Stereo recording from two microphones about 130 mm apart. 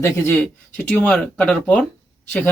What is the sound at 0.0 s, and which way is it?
Speech, 20° left (ahead or behind).